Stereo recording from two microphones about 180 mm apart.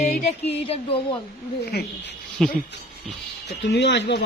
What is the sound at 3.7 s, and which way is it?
Speech, 70° left (ahead or behind).